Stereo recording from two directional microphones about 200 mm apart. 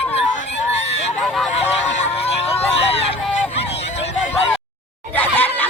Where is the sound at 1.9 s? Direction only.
30° left (ahead or behind).